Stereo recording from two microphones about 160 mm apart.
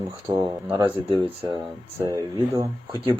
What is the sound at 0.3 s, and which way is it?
Speech, 20° right (ahead or behind).